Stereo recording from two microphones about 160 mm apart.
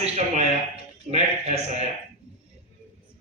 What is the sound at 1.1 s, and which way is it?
Speech, 45° right (ahead or behind).